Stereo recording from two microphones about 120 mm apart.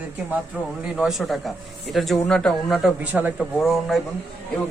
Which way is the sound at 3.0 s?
15° right (ahead or behind).